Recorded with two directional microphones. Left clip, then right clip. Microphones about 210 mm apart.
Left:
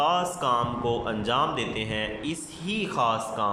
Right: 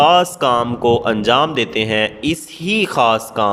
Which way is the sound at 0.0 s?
45° right (ahead or behind).